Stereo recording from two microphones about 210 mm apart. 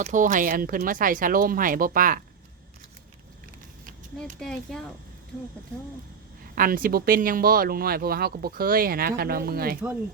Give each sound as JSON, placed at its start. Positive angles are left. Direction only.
{"t": 0.0, "sound": "speech", "side_deg": -40}
{"t": 4.4, "sound": "speech", "side_deg": 5}
{"t": 6.6, "sound": "speech", "side_deg": -40}